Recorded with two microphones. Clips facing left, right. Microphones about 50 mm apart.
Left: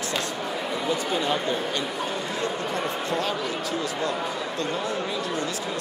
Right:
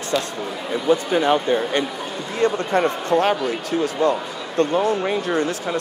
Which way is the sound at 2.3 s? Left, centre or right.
Right.